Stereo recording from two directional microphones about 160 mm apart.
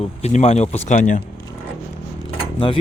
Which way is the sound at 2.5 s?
30° left (ahead or behind).